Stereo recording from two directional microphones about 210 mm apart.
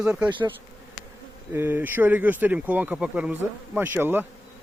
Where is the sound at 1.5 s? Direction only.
10° right (ahead or behind).